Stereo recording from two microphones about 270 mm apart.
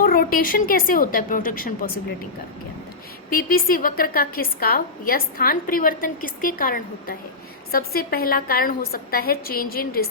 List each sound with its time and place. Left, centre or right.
0.0 s a woman's voice: left
3.2 s a woman's voice: left